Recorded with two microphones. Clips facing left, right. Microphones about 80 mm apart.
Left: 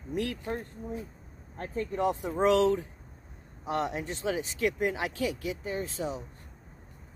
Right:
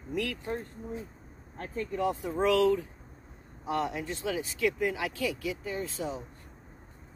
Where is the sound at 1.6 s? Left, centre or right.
Left.